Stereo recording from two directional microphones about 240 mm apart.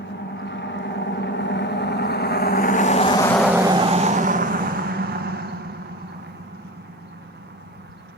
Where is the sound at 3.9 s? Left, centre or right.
Right.